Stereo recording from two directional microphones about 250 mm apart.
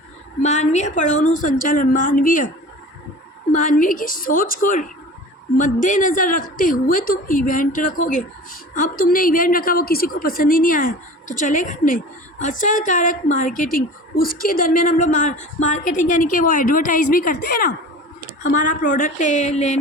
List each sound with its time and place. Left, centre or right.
0.4 s a woman's voice: left
3.5 s a woman's voice: left